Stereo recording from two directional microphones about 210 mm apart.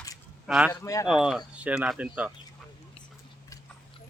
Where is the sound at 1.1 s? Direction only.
Centre (ahead or behind).